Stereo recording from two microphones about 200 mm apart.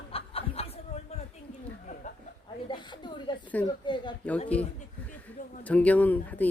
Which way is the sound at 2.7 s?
20° left (ahead or behind).